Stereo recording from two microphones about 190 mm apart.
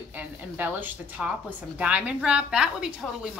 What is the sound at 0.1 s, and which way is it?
A woman's voice, 10° right (ahead or behind).